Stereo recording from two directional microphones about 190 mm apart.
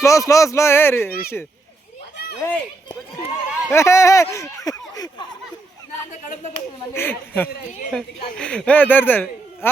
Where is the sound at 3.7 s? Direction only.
15° left (ahead or behind).